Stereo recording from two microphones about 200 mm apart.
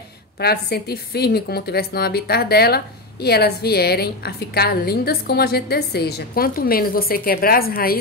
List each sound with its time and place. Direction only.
0.4 s a woman's voice: 50° left (ahead or behind)